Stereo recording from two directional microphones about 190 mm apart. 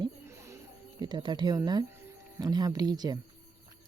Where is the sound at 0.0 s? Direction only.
15° right (ahead or behind).